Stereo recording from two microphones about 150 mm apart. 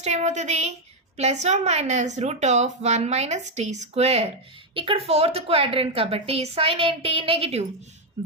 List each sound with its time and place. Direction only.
0.0 s a woman's voice: 50° right (ahead or behind)